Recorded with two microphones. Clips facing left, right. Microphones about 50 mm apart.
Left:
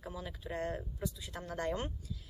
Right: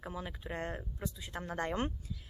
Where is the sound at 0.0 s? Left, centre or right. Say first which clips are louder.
Right 2 dB; right.